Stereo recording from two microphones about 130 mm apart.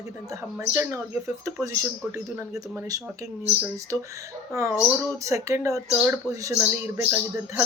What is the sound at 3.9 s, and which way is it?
Speech, 15° right (ahead or behind).